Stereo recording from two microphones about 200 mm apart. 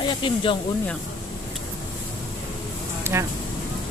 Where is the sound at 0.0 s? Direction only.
25° left (ahead or behind).